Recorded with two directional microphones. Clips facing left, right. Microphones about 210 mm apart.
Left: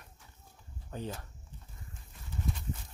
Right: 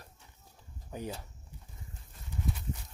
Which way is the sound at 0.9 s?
10° right (ahead or behind).